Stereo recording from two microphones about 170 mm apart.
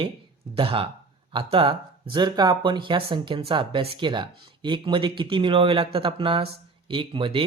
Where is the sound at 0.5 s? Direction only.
30° right (ahead or behind).